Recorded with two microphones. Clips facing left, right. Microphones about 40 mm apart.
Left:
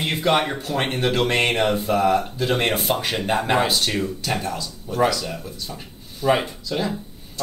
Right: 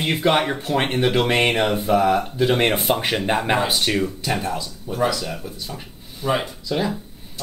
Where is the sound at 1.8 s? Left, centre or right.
Right.